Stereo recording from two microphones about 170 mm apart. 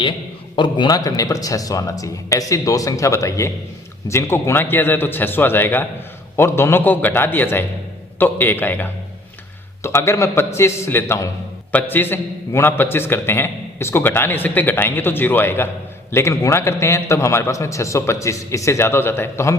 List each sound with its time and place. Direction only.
0.5 s a man's voice: 25° left (ahead or behind)